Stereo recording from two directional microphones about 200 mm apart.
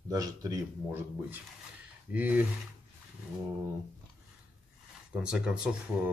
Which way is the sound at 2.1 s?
10° right (ahead or behind).